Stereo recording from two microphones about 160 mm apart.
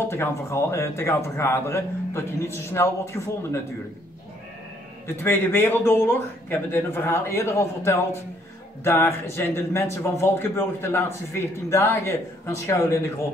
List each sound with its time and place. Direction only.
0.1 s a man's voice: 15° left (ahead or behind)
5.0 s a man's voice: 15° left (ahead or behind)